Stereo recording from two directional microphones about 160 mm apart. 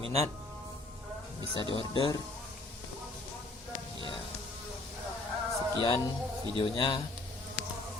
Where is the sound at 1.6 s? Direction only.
30° left (ahead or behind).